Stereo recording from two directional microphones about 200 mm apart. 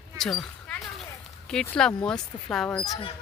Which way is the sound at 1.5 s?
5° left (ahead or behind).